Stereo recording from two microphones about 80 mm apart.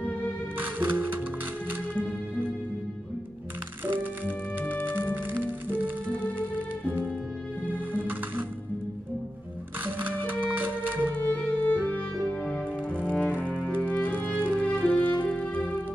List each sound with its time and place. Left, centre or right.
0.6 s music: right
3.8 s music: right
5.1 s music: right
7.6 s music: right
9.8 s music: right
11.1 s music: centre
12.3 s cello: centre
13.4 s music: centre